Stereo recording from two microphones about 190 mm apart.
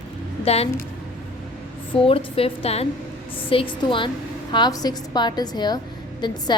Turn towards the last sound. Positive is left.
turn(degrees=20)  # may be behind; listen again after turning